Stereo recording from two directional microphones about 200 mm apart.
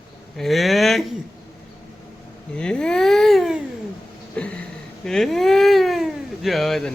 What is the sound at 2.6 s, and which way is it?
Speech, 5° left (ahead or behind).